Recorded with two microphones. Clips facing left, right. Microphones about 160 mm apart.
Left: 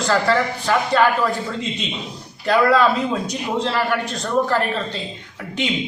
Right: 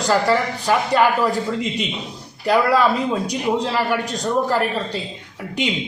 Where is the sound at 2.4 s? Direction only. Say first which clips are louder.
Left 1 dB; 10° right (ahead or behind).